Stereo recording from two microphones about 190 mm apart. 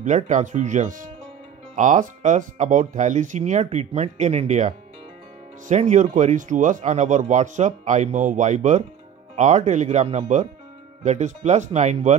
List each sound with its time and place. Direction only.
0.0 s speech: 40° right (ahead or behind)